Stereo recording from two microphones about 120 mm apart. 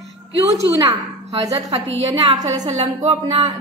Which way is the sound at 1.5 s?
30° right (ahead or behind).